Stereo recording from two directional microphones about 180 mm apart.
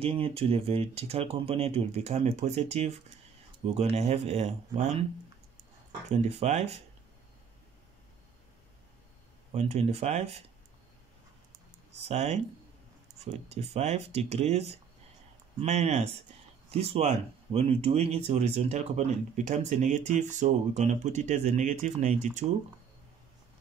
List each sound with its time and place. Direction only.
0.0 s speech: 30° right (ahead or behind)
6.0 s speech: 40° right (ahead or behind)
9.5 s speech: 35° right (ahead or behind)
12.1 s speech: 35° right (ahead or behind)
15.6 s speech: 40° right (ahead or behind)